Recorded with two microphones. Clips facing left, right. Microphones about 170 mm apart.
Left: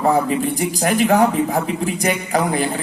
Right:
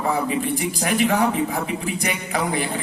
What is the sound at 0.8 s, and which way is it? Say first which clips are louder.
A man's voice: left 5 dB; 40° left (ahead or behind).